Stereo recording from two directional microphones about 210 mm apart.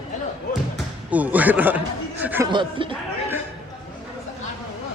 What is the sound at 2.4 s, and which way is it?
Speech, 25° right (ahead or behind).